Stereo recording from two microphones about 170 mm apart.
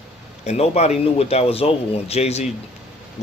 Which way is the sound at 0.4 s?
40° left (ahead or behind).